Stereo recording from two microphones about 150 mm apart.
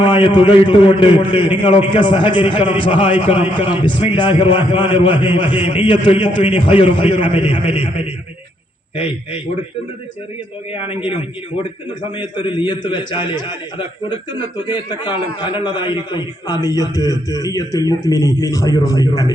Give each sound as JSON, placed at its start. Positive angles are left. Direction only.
{"t": 0.0, "sound": "a man's voice", "side_deg": 30}
{"t": 10.8, "sound": "a man's voice", "side_deg": 35}